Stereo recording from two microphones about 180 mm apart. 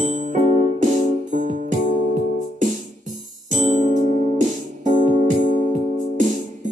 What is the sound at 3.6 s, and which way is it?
Music, 40° right (ahead or behind).